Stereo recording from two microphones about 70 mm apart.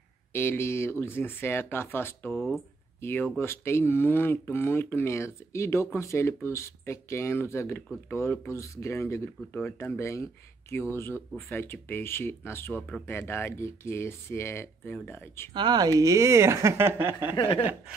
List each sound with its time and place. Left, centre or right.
0.3 s speech: left
8.5 s speech: left
15.5 s speech: right
15.9 s speech: right